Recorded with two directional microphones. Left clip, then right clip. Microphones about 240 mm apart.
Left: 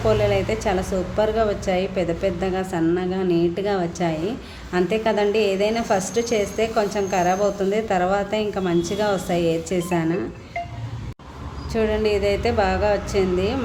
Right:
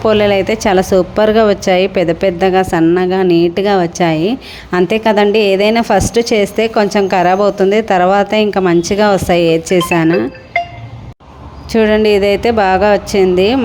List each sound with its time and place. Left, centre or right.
0.0 s speech: right
11.7 s speech: right